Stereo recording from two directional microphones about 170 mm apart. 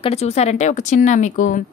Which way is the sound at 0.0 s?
40° left (ahead or behind).